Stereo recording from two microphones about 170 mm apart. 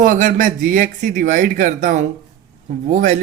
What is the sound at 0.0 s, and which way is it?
Speech, 50° right (ahead or behind).